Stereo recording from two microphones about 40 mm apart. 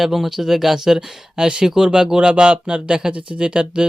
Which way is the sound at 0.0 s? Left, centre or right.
Centre.